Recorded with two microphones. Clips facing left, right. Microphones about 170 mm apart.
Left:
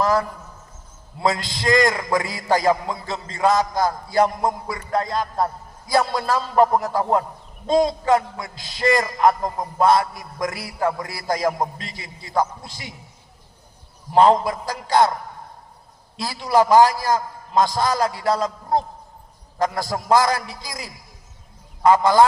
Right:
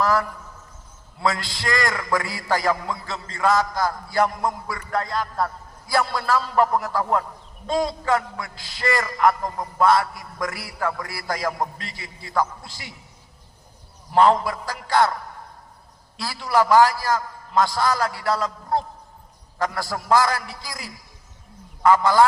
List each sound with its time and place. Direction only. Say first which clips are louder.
0.0 s a sound: left 2 dB; 20° left (ahead or behind)
1.2 s a man's voice: left 3 dB; 20° left (ahead or behind)
14.1 s a man's voice: left 2 dB; 20° left (ahead or behind)
16.1 s a man's voice: left 3 dB; 20° left (ahead or behind)